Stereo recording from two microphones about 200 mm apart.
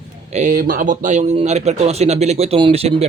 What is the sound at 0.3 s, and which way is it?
A man's voice, 40° right (ahead or behind).